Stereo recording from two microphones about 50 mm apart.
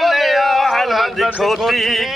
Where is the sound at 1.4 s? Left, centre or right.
Centre.